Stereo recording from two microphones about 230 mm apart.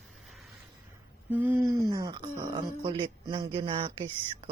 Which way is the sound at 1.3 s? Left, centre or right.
Centre.